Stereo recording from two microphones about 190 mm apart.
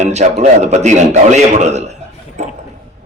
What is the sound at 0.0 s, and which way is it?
Speech, 35° right (ahead or behind).